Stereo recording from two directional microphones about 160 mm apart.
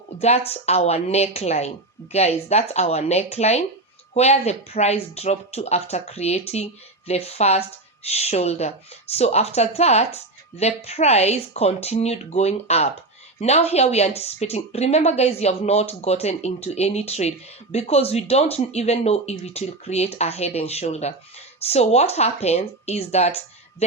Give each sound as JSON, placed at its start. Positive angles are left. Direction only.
{"t": 0.2, "sound": "speech", "side_deg": 40}